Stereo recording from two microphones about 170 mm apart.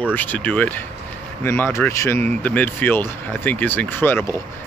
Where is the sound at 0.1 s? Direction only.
10° left (ahead or behind).